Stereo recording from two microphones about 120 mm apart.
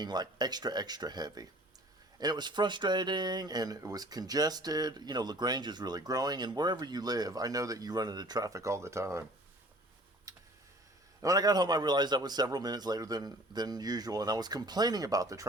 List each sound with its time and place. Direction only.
0.0 s speech: 35° right (ahead or behind)
10.3 s a sound: 30° right (ahead or behind)
11.2 s speech: 30° right (ahead or behind)